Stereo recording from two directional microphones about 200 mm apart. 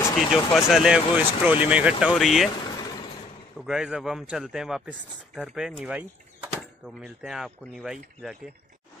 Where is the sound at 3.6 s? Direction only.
5° right (ahead or behind).